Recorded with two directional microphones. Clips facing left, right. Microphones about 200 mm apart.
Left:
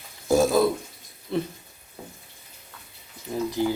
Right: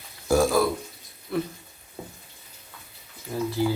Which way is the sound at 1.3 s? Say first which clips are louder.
Left 1 dB; 25° left (ahead or behind).